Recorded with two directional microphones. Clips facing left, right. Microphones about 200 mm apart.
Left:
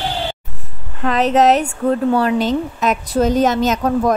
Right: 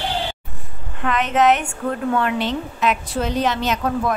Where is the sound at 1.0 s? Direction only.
40° left (ahead or behind).